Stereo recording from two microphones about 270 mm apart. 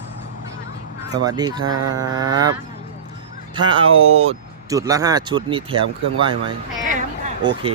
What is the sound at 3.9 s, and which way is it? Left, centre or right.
Speech, right.